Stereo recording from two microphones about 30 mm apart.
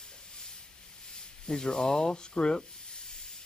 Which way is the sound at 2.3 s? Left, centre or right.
Left.